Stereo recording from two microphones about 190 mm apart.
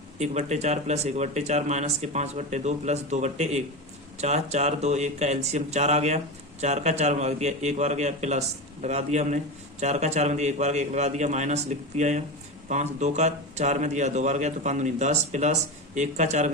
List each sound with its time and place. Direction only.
0.2 s speech: 35° right (ahead or behind)